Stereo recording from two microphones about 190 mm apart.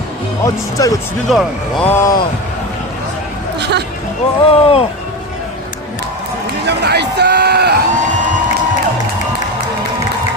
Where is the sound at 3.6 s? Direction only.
60° right (ahead or behind).